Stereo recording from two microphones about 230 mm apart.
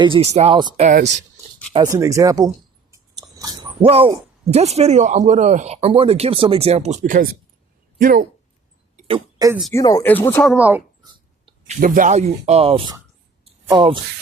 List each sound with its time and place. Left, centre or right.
0.0 s speech: right
1.7 s speech: centre; by 8.3 s right
9.0 s speech: centre
9.7 s speech: centre
11.1 s dog: right
11.8 s speech: right
13.4 s a sound: right